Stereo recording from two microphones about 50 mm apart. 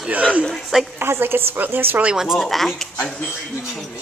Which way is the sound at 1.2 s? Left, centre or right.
Right.